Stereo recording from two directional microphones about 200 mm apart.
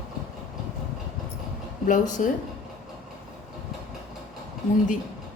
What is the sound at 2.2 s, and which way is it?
Speech, 35° left (ahead or behind).